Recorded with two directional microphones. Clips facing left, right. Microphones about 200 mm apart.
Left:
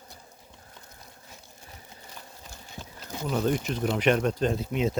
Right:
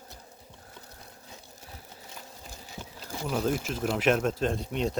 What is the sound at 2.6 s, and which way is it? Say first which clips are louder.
Speech: even; 5° right (ahead or behind).